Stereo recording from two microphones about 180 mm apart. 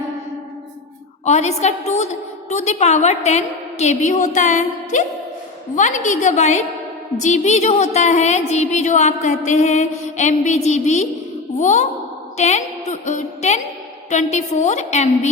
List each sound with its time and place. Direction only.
1.2 s a woman's voice: 40° left (ahead or behind)